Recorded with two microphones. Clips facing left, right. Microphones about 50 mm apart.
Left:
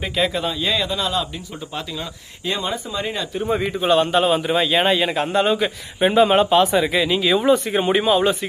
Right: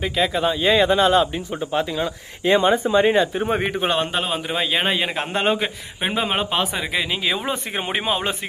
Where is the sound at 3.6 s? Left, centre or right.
Right.